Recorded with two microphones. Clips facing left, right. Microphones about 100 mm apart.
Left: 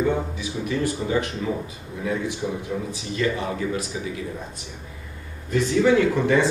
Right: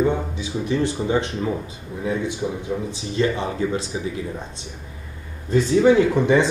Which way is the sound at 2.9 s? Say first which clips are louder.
Right 3 dB; 30° right (ahead or behind).